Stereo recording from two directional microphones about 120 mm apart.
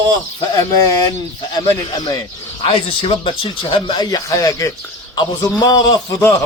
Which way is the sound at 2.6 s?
55° left (ahead or behind).